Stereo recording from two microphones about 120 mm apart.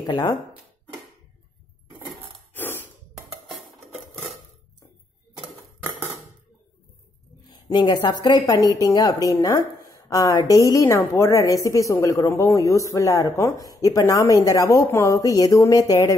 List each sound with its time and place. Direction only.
0.0 s a woman's voice: 35° left (ahead or behind)
2.5 s sigh: 15° left (ahead or behind)
3.4 s dishes: centre (ahead or behind)
7.4 s a woman's voice: 35° left (ahead or behind)